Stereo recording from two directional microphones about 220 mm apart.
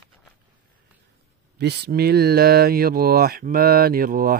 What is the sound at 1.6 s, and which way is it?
Speech, 45° right (ahead or behind).